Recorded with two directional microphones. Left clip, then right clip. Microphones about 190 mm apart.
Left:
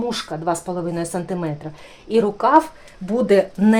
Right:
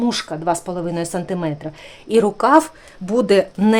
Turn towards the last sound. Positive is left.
turn(degrees=-30)  # may be behind; listen again after turning